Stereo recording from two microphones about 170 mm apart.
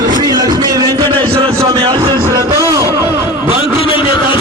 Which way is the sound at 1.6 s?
30° right (ahead or behind).